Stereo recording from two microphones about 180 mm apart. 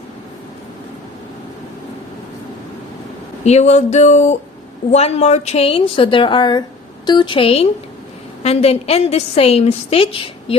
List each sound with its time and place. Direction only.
3.4 s a woman's voice: 40° left (ahead or behind)